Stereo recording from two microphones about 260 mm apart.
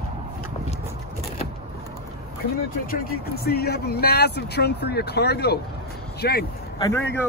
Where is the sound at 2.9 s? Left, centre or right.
Left.